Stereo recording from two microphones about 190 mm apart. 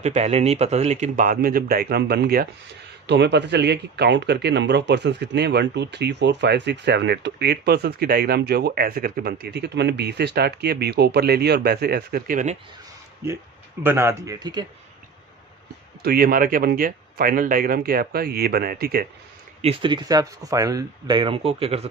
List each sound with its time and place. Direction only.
0.0 s speech: 35° right (ahead or behind); by 2.5 s 55° right (ahead or behind)
3.1 s speech: 65° right (ahead or behind); by 12.5 s 45° right (ahead or behind)
13.8 s speech: 15° right (ahead or behind)
16.0 s speech: 50° right (ahead or behind)
19.6 s speech: 25° right (ahead or behind)